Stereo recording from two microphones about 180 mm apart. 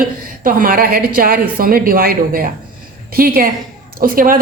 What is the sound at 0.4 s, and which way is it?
A woman's voice, 50° right (ahead or behind).